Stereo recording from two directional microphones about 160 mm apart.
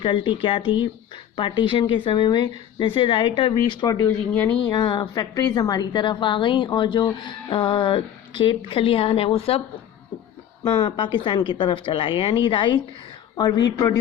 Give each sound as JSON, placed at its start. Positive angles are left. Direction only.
{"t": 0.0, "sound": "a woman's voice", "side_deg": 30}
{"t": 10.6, "sound": "a woman's voice", "side_deg": 30}